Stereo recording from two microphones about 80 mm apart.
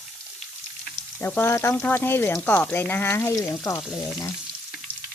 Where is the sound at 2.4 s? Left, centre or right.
Centre; by 4.1 s left.